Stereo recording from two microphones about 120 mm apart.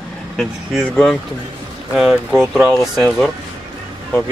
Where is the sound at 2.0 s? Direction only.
5° right (ahead or behind).